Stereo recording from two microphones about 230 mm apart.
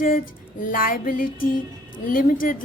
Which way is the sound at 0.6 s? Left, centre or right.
Left.